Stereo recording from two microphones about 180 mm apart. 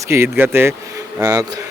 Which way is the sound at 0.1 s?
15° right (ahead or behind).